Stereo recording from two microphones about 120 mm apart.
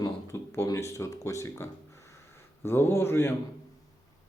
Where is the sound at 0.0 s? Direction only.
25° left (ahead or behind).